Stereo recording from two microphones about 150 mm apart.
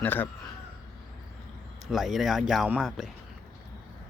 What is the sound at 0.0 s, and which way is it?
Speech, 10° left (ahead or behind).